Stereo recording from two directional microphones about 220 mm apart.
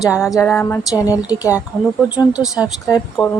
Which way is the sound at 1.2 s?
5° right (ahead or behind).